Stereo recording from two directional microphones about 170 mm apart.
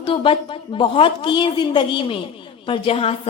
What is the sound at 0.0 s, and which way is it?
A woman's voice, 30° left (ahead or behind).